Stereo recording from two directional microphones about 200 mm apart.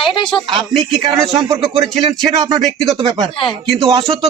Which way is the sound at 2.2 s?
20° right (ahead or behind).